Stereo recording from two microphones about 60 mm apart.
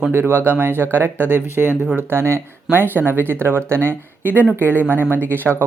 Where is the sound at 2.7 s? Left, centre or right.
Right.